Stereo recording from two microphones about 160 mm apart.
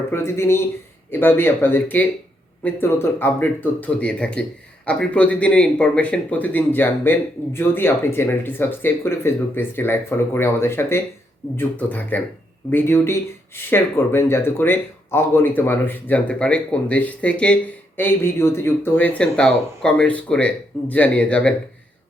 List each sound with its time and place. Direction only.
0.1 s speech: 15° left (ahead or behind)